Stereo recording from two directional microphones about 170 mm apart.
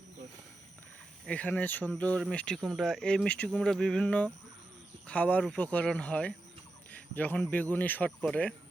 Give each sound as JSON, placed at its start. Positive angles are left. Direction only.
{"t": 1.2, "sound": "speech", "side_deg": 5}